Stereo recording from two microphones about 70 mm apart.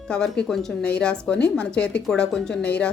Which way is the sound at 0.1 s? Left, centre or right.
Centre.